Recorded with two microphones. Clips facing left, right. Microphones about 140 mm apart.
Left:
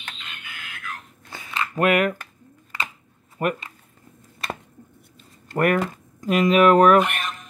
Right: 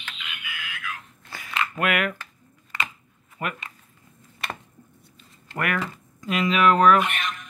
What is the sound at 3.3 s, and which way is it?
Speech, 40° left (ahead or behind).